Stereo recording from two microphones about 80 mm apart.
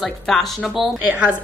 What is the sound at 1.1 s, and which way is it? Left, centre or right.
Speech, centre.